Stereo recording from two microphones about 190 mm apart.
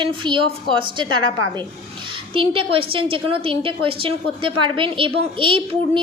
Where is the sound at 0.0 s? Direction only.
25° right (ahead or behind).